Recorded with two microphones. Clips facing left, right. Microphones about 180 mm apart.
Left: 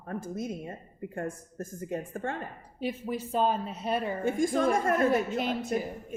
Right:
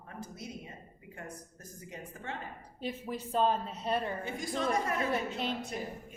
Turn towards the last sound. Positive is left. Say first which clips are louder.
# left 6 dB
turn(degrees=50)  # may be behind; listen again after turning